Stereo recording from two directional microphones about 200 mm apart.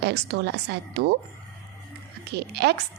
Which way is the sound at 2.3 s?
55° right (ahead or behind).